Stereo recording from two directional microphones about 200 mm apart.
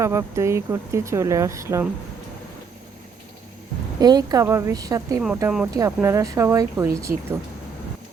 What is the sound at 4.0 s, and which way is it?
Speech, 20° right (ahead or behind).